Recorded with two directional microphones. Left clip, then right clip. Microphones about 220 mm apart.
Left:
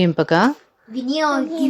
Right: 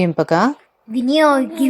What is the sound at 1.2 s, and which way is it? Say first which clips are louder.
Speech: right 6 dB; 35° right (ahead or behind).